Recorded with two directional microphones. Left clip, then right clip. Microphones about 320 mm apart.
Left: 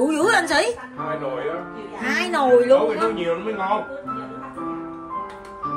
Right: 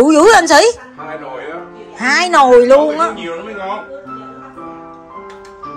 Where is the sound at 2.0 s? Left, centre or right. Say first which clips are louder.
Right 11 dB; right.